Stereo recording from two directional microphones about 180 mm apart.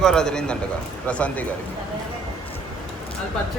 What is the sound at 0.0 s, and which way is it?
A man's voice, 5° left (ahead or behind).